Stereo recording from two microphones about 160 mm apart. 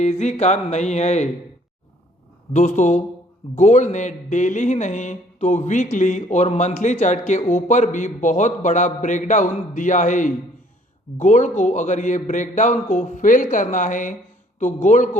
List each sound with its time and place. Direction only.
0.0 s speech: 45° left (ahead or behind)
2.5 s speech: 45° left (ahead or behind)